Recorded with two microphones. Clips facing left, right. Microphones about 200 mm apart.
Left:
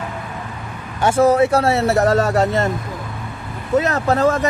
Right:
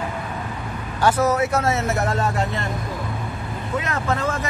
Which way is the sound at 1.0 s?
30° left (ahead or behind).